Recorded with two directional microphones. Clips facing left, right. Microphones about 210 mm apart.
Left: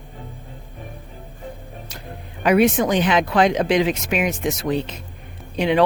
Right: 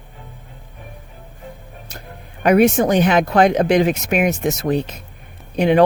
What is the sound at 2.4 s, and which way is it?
Speech, 45° right (ahead or behind).